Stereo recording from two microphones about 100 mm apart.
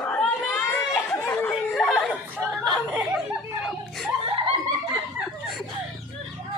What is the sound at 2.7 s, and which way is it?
Chuckle, 5° right (ahead or behind).